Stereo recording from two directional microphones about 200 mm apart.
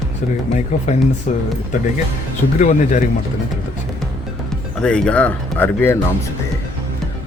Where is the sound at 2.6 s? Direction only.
40° left (ahead or behind).